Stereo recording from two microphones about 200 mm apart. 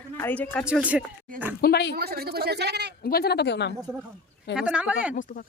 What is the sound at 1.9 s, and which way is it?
Speech, 50° right (ahead or behind).